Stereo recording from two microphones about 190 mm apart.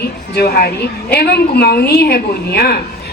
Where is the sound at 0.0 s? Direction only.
55° left (ahead or behind).